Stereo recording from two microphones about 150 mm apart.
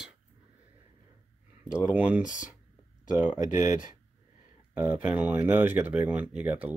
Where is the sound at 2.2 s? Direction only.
55° left (ahead or behind).